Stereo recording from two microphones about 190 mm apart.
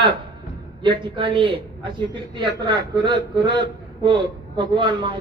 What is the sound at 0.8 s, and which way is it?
A man's voice, 25° right (ahead or behind).